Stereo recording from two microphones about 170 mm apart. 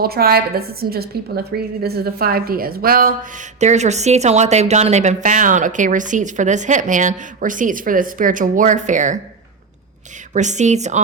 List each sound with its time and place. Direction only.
0.0 s a woman's voice: 65° right (ahead or behind)
3.6 s speech: 45° right (ahead or behind)
10.3 s speech: 45° right (ahead or behind)